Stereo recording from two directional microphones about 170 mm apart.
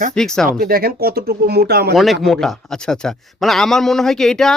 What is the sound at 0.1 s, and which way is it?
Speech, 5° left (ahead or behind).